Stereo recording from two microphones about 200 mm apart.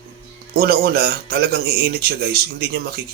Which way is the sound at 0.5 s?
50° right (ahead or behind).